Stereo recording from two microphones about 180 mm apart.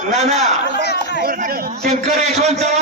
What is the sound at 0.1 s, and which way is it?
Speech, 35° right (ahead or behind).